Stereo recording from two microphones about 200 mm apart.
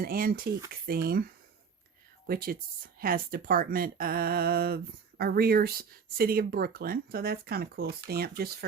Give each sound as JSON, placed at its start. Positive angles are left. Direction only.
{"t": 0.0, "sound": "speech", "side_deg": -50}